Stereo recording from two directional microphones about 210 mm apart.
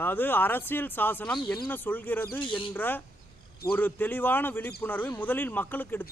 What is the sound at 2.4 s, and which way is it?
Speech, 25° left (ahead or behind).